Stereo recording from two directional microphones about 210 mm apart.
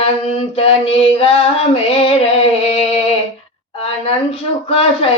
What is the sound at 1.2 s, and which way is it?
Female singing, 25° left (ahead or behind).